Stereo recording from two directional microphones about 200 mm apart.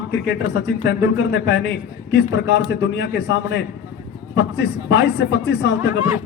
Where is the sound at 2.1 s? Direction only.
60° left (ahead or behind).